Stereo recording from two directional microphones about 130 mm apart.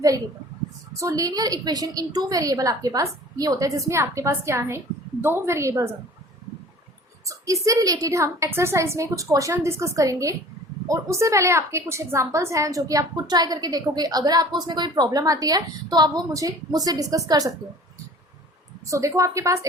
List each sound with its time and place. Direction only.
0.9 s a woman's voice: 25° right (ahead or behind)
7.3 s a woman's voice: 25° right (ahead or behind)
18.9 s a woman's voice: 25° right (ahead or behind)